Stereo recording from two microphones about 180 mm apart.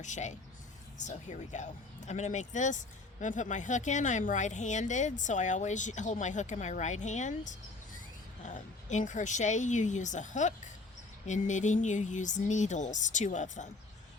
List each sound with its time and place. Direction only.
0.0 s speech: 40° left (ahead or behind)